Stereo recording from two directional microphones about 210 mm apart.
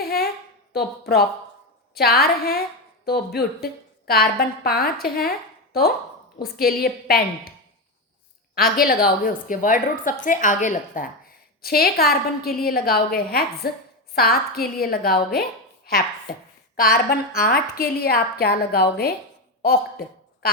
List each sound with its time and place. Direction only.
0.0 s a sound: 45° left (ahead or behind)
0.7 s a woman's voice: 50° left (ahead or behind)
8.5 s a woman's voice: 45° left (ahead or behind)